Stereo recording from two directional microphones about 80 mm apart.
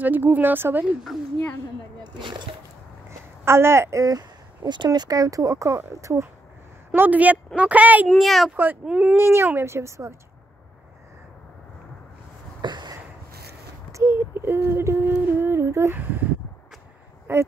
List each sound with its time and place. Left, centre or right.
0.0 s a woman's voice: right
2.1 s speech: right
3.1 s a sound: right
4.1 s a sound: right
4.8 s speech: right
6.9 s a woman's voice: centre
8.1 s speech: centre
8.8 s speech: centre
9.1 s speech: right
12.6 s a sound: right
13.9 s a sound: right
15.2 s humming: right
16.0 s a woman's voice: right
17.3 s speech: right